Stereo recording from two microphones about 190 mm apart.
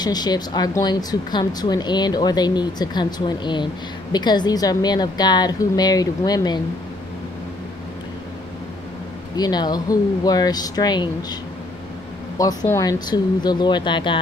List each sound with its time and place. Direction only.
0.0 s speech: 20° left (ahead or behind)
9.4 s speech: 20° left (ahead or behind)
12.4 s speech: 15° left (ahead or behind)